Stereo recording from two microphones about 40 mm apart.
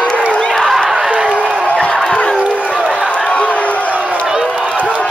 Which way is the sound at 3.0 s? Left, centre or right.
Left.